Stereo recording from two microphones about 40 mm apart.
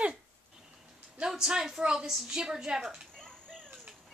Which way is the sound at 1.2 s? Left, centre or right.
Centre.